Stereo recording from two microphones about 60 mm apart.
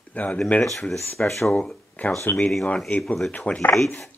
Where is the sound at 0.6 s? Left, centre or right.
Centre.